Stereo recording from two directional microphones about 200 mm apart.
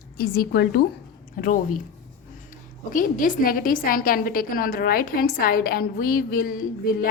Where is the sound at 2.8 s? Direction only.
40° left (ahead or behind).